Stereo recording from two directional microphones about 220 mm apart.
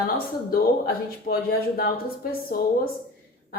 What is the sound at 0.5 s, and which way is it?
A woman's voice, 45° left (ahead or behind).